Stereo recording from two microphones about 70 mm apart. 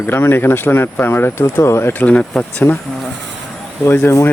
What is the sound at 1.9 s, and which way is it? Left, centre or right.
Speech, left.